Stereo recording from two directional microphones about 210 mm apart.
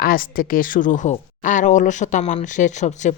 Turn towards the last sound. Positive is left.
turn(degrees=35)  # may be behind; listen again after turning